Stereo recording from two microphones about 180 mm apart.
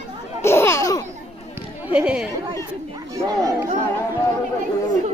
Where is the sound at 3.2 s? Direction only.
20° right (ahead or behind).